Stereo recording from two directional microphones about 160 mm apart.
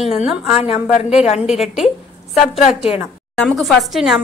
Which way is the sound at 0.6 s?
40° left (ahead or behind).